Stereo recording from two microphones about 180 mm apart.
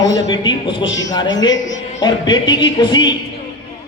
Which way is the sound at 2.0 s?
25° left (ahead or behind).